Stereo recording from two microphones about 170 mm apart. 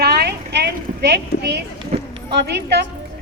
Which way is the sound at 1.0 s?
70° right (ahead or behind).